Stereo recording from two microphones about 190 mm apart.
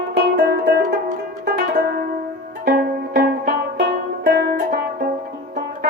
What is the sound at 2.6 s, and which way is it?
Music, 55° right (ahead or behind).